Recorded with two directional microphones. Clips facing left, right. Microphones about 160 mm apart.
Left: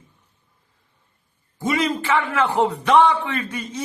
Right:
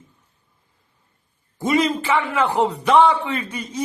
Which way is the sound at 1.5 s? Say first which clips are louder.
Right 3 dB; 15° right (ahead or behind).